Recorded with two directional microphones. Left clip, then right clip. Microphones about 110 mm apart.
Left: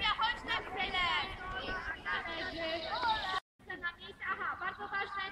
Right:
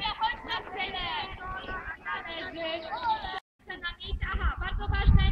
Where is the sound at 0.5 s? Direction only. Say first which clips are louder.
Right 3 dB; 40° right (ahead or behind).